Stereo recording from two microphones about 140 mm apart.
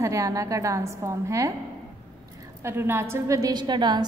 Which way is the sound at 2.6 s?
15° right (ahead or behind).